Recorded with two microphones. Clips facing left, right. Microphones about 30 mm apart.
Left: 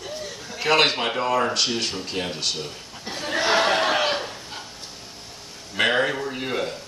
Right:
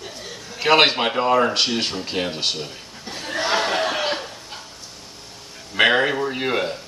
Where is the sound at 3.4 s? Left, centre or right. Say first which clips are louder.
Left 1 dB; centre.